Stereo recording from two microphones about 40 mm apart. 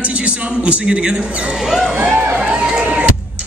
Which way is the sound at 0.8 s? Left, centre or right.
Right.